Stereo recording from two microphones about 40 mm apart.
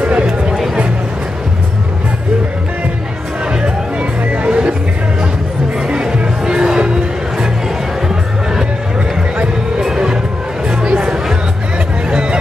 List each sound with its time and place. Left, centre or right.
0.0 s music: right
4.3 s music: right
5.9 s music: right
9.8 s music: centre
12.1 s a sound: right